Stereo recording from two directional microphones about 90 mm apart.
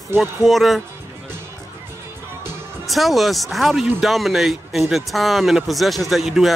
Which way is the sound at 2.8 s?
Centre (ahead or behind).